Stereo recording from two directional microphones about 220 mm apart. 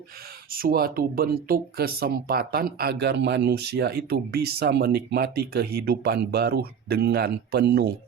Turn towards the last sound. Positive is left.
turn(degrees=-50)  # may be behind; listen again after turning